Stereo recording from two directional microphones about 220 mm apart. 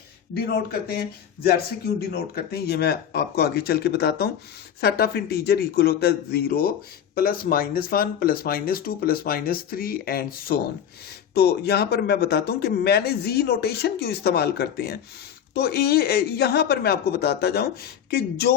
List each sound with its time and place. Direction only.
0.3 s speech: 45° left (ahead or behind)